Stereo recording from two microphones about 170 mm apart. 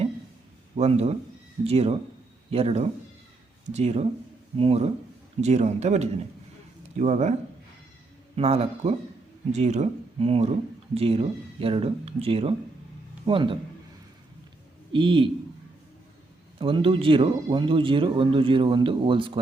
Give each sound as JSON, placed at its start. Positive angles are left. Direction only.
{"t": 0.8, "sound": "speech", "side_deg": -40}
{"t": 8.4, "sound": "speech", "side_deg": -35}
{"t": 14.9, "sound": "speech", "side_deg": -30}
{"t": 16.6, "sound": "speech", "side_deg": -30}